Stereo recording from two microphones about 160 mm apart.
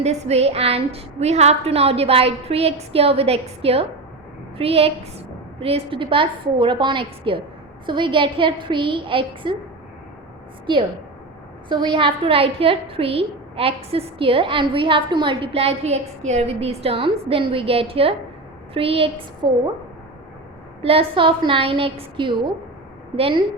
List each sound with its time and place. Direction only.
0.0 s a woman's voice: 40° right (ahead or behind)
10.7 s a woman's voice: 30° right (ahead or behind)
20.8 s a woman's voice: 35° right (ahead or behind)